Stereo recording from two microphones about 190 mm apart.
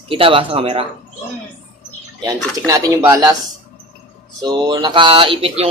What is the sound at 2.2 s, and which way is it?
Speech, 20° right (ahead or behind).